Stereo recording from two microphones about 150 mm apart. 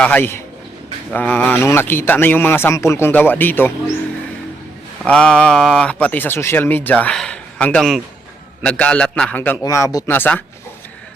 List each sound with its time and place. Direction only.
0.0 s speech: 10° left (ahead or behind)
5.0 s speech: 5° left (ahead or behind)
9.6 s speech: 20° left (ahead or behind)